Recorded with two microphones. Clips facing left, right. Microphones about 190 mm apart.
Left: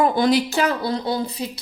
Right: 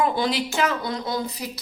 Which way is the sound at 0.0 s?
45° left (ahead or behind).